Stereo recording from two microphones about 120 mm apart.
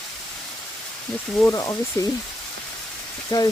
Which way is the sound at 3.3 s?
35° left (ahead or behind).